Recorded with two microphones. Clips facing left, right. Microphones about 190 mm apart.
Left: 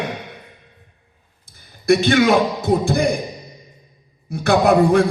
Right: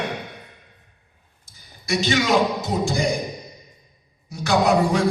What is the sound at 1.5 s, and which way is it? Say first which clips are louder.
A man's voice: left 11 dB; 55° left (ahead or behind).